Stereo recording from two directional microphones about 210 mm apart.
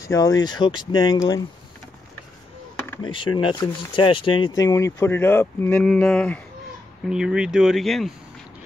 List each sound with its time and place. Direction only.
0.0 s speech: 15° left (ahead or behind)
3.0 s speech: 25° left (ahead or behind); by 8.1 s centre (ahead or behind)